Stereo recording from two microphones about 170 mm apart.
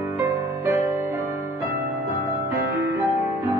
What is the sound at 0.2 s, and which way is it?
Music, 20° right (ahead or behind).